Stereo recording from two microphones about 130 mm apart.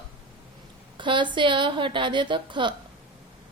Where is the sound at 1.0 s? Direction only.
40° right (ahead or behind).